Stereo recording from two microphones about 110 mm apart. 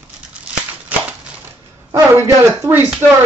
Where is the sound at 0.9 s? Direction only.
15° right (ahead or behind).